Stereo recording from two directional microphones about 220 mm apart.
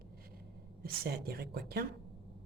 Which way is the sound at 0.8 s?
45° right (ahead or behind).